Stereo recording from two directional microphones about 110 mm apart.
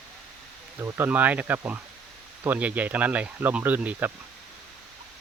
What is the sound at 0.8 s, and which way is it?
Speech, 20° right (ahead or behind).